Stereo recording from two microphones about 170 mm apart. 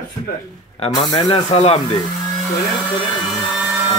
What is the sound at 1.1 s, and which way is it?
Speech, 35° left (ahead or behind).